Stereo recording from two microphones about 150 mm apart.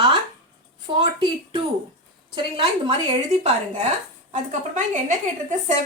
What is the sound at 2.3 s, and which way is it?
A woman's voice, 35° right (ahead or behind).